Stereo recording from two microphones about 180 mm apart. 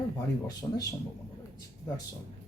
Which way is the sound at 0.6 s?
15° left (ahead or behind).